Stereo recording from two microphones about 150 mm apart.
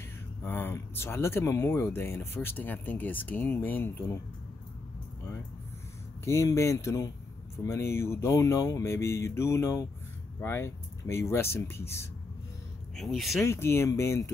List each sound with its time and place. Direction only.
0.4 s speech: 15° left (ahead or behind)
6.2 s speech: 20° left (ahead or behind)
12.9 s speech: centre (ahead or behind)
13.4 s speech: 15° left (ahead or behind)